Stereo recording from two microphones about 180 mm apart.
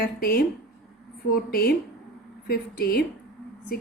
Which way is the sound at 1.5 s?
55° left (ahead or behind).